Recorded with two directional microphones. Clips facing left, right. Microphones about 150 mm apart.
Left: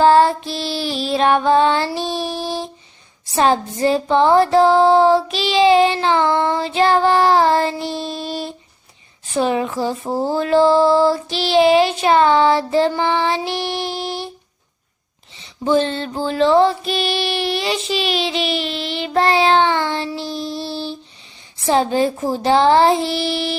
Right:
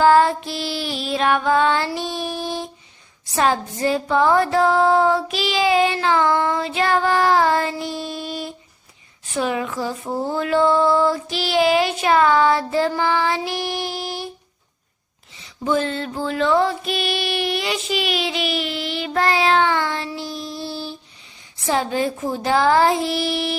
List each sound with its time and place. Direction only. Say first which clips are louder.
0.0 s music: left 2 dB; 30° left (ahead or behind)
15.4 s music: left 4 dB; 30° left (ahead or behind)